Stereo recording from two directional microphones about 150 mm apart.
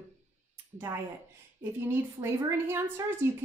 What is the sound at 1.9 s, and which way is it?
A woman's voice, 15° right (ahead or behind).